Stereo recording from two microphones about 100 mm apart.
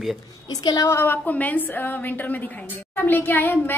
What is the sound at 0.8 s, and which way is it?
A woman's voice, 20° left (ahead or behind).